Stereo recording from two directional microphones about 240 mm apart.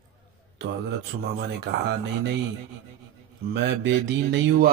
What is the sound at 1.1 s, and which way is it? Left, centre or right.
Speech, right.